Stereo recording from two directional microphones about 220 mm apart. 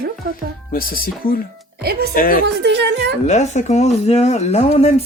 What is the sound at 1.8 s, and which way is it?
Speech, 45° right (ahead or behind).